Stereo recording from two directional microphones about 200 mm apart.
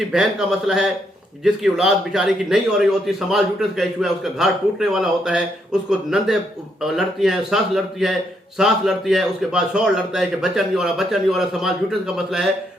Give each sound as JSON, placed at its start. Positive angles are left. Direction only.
{"t": 0.0, "sound": "a man's voice", "side_deg": 0}